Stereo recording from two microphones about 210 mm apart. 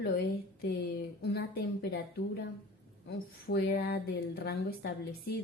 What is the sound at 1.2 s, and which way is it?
Speech, 50° left (ahead or behind).